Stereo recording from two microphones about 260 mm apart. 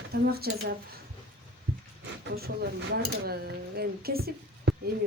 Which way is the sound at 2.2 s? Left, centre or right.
Right.